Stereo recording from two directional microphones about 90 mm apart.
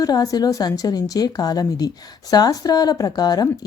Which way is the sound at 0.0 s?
45° left (ahead or behind).